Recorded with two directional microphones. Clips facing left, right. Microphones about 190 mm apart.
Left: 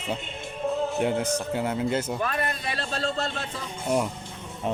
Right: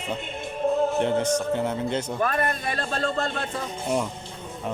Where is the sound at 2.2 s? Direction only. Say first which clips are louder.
Right 4 dB; 50° right (ahead or behind).